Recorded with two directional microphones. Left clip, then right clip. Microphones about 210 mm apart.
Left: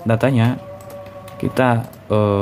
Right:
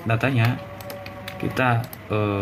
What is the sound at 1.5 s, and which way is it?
Speech, 60° left (ahead or behind).